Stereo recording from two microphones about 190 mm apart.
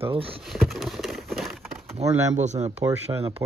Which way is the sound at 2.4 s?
35° right (ahead or behind).